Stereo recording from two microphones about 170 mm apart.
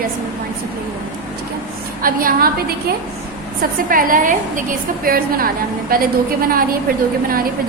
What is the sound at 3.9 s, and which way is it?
A woman's voice, 55° right (ahead or behind).